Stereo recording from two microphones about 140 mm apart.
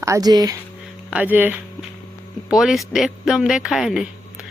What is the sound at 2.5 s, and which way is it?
Speech, centre (ahead or behind).